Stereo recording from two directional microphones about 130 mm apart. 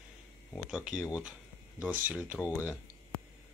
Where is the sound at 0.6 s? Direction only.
5° right (ahead or behind).